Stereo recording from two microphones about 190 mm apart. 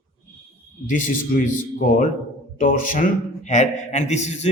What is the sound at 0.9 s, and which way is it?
A man's voice, 45° left (ahead or behind).